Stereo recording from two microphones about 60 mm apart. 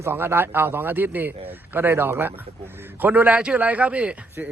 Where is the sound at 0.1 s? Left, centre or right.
Right.